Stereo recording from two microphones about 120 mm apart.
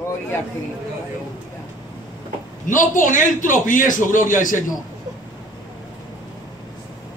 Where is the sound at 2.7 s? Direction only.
90° left.